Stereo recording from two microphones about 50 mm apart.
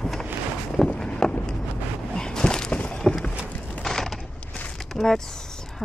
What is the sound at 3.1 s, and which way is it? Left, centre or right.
Boat, centre.